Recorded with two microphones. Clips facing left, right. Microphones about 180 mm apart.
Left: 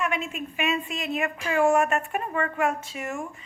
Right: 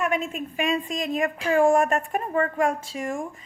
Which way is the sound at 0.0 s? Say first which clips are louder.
Right 3 dB; 40° right (ahead or behind).